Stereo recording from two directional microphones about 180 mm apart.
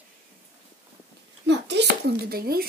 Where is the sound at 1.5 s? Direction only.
70° right (ahead or behind).